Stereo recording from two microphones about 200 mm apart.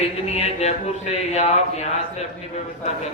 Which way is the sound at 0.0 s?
30° left (ahead or behind).